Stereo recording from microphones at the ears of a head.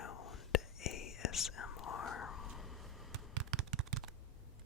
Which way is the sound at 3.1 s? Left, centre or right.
Right.